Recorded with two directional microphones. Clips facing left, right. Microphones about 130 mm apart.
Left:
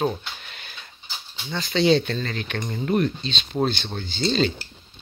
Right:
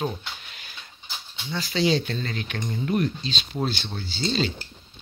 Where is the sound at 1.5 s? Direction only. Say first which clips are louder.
Left 4 dB; 55° left (ahead or behind).